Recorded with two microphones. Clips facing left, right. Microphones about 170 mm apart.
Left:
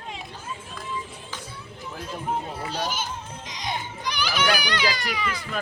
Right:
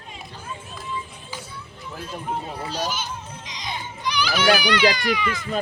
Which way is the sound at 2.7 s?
50° left (ahead or behind).